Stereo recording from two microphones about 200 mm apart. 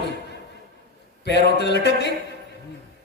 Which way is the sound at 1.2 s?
60° left (ahead or behind).